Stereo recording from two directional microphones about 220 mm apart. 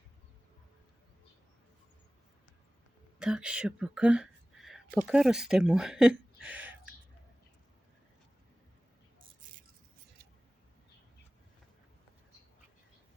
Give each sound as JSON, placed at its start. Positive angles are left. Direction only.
{"t": 3.2, "sound": "speech", "side_deg": -5}